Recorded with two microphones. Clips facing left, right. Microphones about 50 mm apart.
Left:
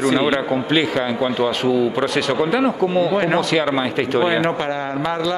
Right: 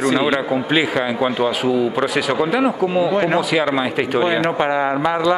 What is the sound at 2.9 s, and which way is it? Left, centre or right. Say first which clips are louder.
Speech: even; centre.